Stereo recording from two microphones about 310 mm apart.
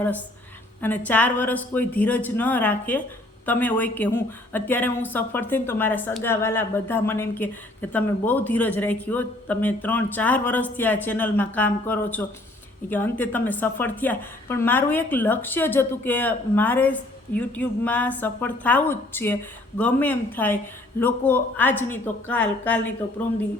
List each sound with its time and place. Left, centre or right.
0.8 s speech: centre